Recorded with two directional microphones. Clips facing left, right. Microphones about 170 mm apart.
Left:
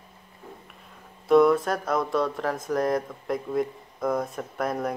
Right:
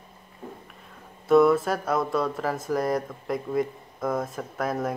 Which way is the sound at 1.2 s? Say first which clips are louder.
Even; 5° right (ahead or behind).